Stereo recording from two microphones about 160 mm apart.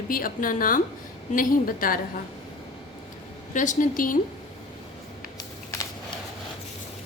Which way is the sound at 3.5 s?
50° left (ahead or behind).